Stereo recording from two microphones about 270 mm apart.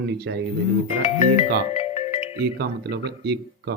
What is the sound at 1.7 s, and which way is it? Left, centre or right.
Music, left.